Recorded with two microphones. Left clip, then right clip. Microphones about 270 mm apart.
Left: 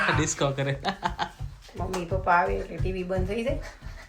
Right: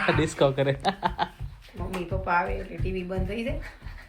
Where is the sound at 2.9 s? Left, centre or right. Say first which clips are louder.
Left 2 dB; left.